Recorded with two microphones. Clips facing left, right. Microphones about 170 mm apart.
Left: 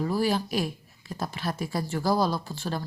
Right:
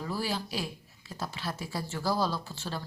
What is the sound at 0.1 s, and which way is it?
Speech, 50° left (ahead or behind).